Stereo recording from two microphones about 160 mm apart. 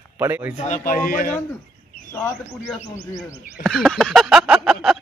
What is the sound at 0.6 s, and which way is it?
Speech, 50° left (ahead or behind).